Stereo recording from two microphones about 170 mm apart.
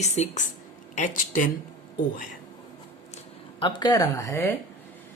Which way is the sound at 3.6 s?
25° left (ahead or behind).